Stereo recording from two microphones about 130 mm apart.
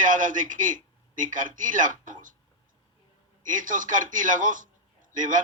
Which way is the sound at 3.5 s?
85° right.